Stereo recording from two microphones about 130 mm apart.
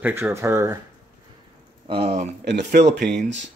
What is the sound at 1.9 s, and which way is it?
Speech, 50° right (ahead or behind).